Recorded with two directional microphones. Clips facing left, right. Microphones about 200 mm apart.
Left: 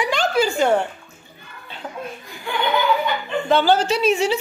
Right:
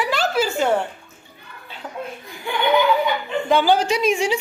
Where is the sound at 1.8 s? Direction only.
Centre (ahead or behind).